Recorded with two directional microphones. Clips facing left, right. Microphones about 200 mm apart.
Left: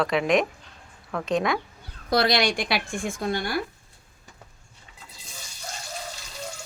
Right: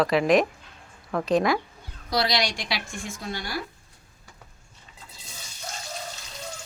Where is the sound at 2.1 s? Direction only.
55° left (ahead or behind).